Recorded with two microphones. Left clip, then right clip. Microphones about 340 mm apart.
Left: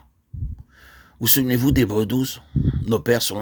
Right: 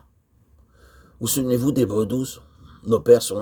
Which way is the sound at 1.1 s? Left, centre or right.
Left.